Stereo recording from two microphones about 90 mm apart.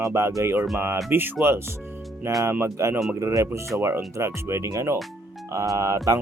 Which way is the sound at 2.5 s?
30° right (ahead or behind).